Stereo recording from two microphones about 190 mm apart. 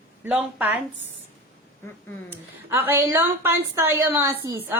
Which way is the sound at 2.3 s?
10° right (ahead or behind).